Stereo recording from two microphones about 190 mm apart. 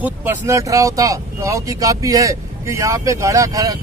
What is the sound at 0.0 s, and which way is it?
Speech, 10° right (ahead or behind).